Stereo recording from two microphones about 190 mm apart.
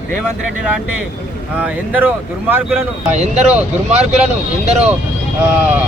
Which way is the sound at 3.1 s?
35° right (ahead or behind).